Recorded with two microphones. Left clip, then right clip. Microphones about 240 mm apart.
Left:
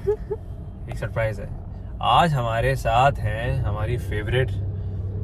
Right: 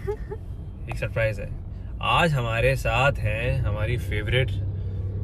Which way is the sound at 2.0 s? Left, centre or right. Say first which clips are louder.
Left 4 dB; centre.